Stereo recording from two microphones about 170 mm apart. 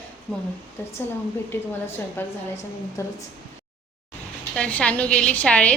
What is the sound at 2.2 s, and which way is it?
Speech, 10° left (ahead or behind).